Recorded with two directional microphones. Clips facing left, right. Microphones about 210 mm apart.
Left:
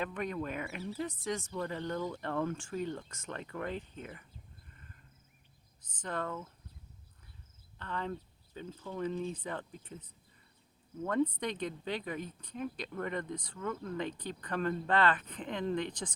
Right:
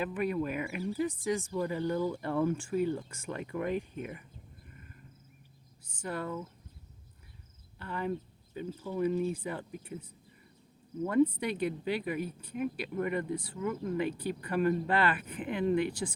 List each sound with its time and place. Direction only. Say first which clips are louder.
0.0 s speech: right 5 dB; 5° right (ahead or behind)
5.8 s speech: right 1 dB; 10° right (ahead or behind)
7.8 s speech: right 4 dB; 10° right (ahead or behind)